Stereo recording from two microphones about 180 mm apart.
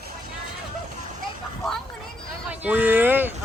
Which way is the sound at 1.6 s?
Centre (ahead or behind).